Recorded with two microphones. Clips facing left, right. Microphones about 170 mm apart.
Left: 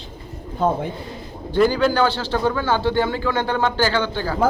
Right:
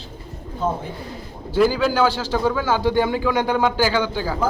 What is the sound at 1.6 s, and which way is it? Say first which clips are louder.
A man's voice: left 1 dB; 5° right (ahead or behind).